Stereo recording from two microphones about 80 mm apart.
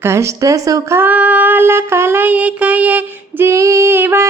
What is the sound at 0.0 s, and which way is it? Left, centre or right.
Speech, right.